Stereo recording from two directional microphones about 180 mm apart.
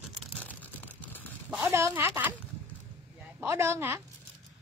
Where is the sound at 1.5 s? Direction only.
15° right (ahead or behind).